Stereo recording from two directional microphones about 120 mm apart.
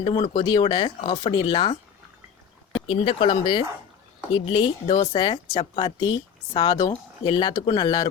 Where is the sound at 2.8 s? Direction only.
50° left (ahead or behind).